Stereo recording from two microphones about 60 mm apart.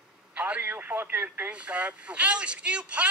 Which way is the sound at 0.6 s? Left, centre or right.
Right.